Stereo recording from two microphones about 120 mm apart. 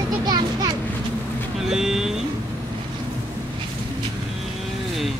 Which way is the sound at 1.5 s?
5° right (ahead or behind).